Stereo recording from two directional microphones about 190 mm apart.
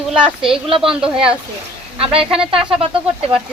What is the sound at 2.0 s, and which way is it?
Speech, 30° right (ahead or behind).